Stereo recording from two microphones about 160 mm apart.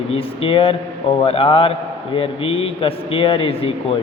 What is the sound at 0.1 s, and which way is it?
Speech, 35° left (ahead or behind).